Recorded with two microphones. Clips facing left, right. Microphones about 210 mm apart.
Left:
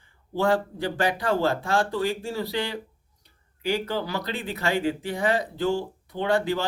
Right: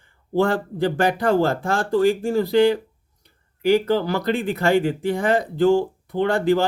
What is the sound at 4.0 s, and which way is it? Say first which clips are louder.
Speech: right 8 dB; 50° right (ahead or behind).